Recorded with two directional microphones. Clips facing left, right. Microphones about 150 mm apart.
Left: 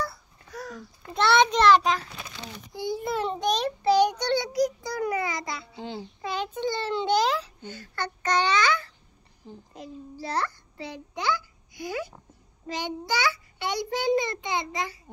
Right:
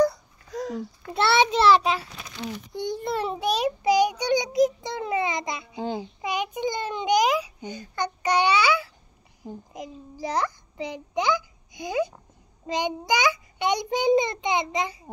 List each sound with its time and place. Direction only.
0.0 s babbling: 20° right (ahead or behind)
1.1 s a child's voice: 5° right (ahead or behind)
2.8 s child singing: 5° left (ahead or behind); by 5.8 s 20° right (ahead or behind)
6.2 s a sound: 15° right (ahead or behind)
9.7 s a child's voice: 15° right (ahead or behind)
12.6 s child singing: 15° right (ahead or behind)